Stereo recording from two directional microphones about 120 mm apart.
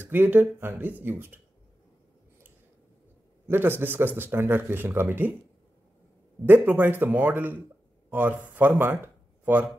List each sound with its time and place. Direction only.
0.1 s speech: 15° right (ahead or behind)
3.4 s speech: 20° right (ahead or behind)
6.4 s speech: 15° right (ahead or behind)
9.0 s a sound: 15° right (ahead or behind)